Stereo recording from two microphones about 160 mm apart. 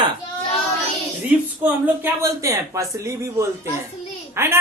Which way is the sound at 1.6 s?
10° right (ahead or behind).